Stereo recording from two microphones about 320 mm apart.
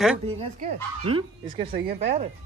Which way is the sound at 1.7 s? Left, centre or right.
Right.